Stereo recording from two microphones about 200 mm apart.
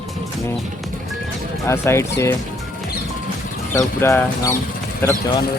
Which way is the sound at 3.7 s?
15° left (ahead or behind).